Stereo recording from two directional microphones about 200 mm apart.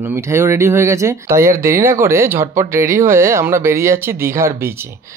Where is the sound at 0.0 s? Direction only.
15° right (ahead or behind).